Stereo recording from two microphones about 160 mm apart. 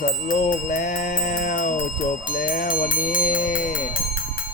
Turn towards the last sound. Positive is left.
turn(degrees=55)  # may be behind; listen again after turning